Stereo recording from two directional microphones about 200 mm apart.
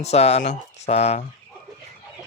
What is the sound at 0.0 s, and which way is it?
Speech, 30° left (ahead or behind).